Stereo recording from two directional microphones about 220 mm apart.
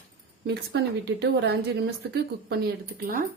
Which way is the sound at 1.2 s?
50° right (ahead or behind).